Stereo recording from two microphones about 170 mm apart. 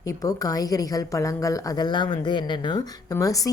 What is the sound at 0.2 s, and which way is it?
A woman's voice, 20° left (ahead or behind).